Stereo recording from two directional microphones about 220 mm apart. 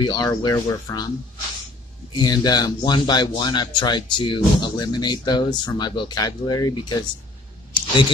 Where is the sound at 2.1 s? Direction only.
20° left (ahead or behind).